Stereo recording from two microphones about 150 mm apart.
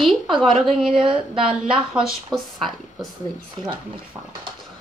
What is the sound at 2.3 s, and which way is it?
Speech, centre (ahead or behind).